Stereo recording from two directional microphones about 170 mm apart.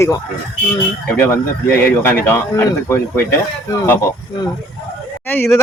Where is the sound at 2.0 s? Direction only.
10° left (ahead or behind).